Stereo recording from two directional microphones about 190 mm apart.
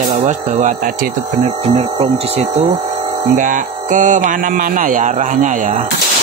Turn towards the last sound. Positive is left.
turn(degrees=-40)  # may be behind; listen again after turning